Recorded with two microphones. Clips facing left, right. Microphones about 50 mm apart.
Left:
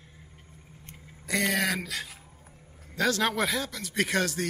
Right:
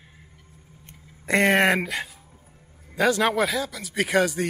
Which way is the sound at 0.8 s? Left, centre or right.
Right.